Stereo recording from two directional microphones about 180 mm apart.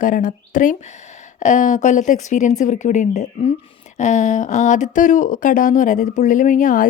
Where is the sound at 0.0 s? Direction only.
45° left (ahead or behind).